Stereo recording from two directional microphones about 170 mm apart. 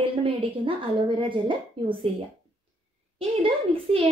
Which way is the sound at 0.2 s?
30° right (ahead or behind).